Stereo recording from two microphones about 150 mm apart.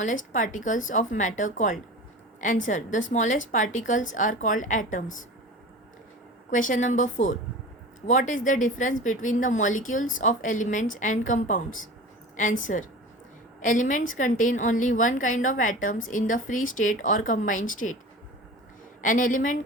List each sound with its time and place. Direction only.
0.0 s a woman's voice: 60° left (ahead or behind)
6.5 s a woman's voice: 60° left (ahead or behind)
19.0 s a woman's voice: 60° left (ahead or behind)